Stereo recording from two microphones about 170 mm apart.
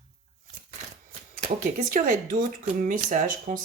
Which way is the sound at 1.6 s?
50° right (ahead or behind).